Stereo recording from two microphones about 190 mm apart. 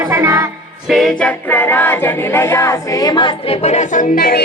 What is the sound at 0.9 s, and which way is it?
Music, centre (ahead or behind).